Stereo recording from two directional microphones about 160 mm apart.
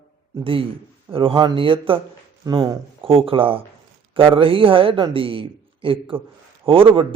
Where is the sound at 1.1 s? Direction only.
35° right (ahead or behind).